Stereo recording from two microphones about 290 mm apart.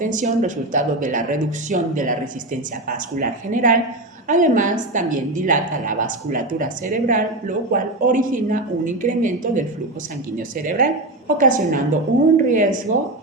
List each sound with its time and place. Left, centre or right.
0.0 s a woman's voice: right